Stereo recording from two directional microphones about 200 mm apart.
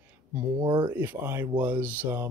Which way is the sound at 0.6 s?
25° right (ahead or behind).